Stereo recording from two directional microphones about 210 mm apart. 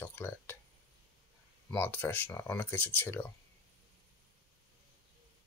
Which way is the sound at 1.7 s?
10° left (ahead or behind).